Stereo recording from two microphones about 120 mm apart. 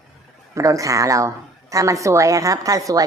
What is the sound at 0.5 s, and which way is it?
Speech, 25° right (ahead or behind).